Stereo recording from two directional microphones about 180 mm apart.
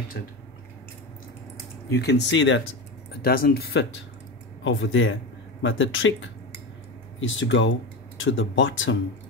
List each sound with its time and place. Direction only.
0.2 s speech: 60° left (ahead or behind)
1.9 s speech: 70° left (ahead or behind); by 2.6 s 90° left
3.1 s speech: 55° left (ahead or behind)
4.6 s speech: 90° left